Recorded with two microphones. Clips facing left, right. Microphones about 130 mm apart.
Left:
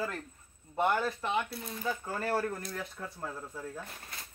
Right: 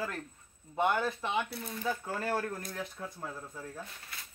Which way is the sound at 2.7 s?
15° right (ahead or behind).